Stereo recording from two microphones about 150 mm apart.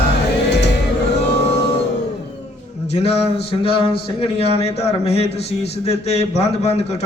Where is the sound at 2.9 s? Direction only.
45° left (ahead or behind).